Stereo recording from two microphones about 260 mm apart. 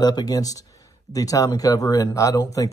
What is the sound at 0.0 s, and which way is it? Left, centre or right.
Speech, centre.